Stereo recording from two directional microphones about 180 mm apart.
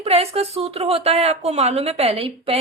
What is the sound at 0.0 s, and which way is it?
A woman's voice, 35° right (ahead or behind).